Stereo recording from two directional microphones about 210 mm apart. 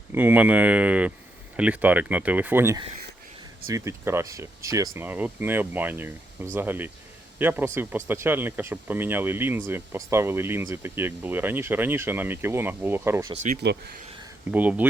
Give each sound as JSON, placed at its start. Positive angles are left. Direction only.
{"t": 0.1, "sound": "speech", "side_deg": -10}
{"t": 13.3, "sound": "speech", "side_deg": -35}
{"t": 13.6, "sound": "speech", "side_deg": -55}
{"t": 14.5, "sound": "speech", "side_deg": -5}